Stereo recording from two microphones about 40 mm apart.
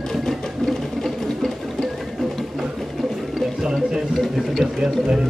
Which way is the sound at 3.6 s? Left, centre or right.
Centre.